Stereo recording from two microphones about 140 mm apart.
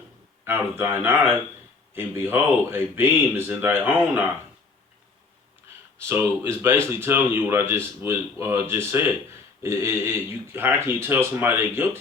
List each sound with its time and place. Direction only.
0.4 s speech: 15° right (ahead or behind)
6.0 s speech: 15° right (ahead or behind)